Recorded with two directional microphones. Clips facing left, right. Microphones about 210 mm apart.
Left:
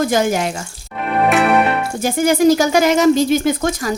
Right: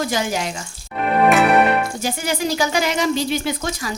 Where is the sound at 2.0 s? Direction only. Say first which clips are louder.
Left 9 dB; 50° left (ahead or behind).